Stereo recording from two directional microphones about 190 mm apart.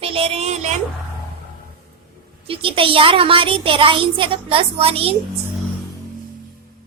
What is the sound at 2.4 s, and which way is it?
A child's voice, 30° right (ahead or behind).